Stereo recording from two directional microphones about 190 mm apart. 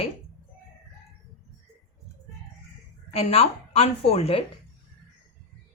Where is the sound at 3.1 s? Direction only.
30° left (ahead or behind).